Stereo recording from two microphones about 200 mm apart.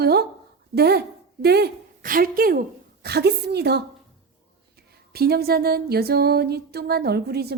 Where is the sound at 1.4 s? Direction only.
55° right (ahead or behind).